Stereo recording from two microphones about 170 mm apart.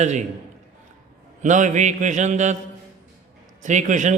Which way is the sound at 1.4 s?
45° right (ahead or behind).